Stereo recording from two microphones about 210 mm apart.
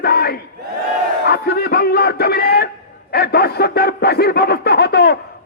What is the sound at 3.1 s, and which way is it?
A man's voice, 50° left (ahead or behind).